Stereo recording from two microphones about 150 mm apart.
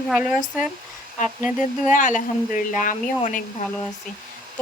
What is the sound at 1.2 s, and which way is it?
A woman's voice, 60° left (ahead or behind).